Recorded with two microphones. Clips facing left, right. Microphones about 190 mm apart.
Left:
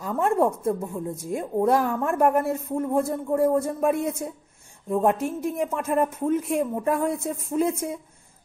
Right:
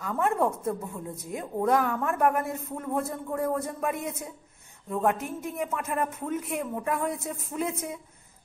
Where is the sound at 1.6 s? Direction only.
30° left (ahead or behind).